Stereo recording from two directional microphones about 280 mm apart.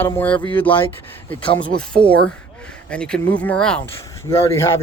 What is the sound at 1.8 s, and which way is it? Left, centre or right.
Speech, centre.